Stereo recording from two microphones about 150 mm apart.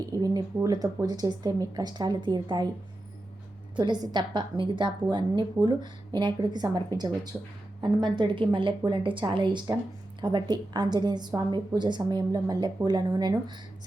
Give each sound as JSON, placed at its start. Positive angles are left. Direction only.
{"t": 0.2, "sound": "a woman's voice", "side_deg": -25}
{"t": 3.8, "sound": "a woman's voice", "side_deg": -30}
{"t": 7.3, "sound": "speech", "side_deg": -10}
{"t": 7.8, "sound": "a woman's voice", "side_deg": -30}